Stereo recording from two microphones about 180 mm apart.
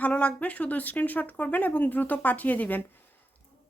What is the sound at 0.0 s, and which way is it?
A woman's voice, 5° left (ahead or behind).